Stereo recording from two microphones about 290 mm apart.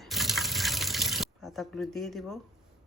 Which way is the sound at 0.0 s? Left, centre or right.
Centre.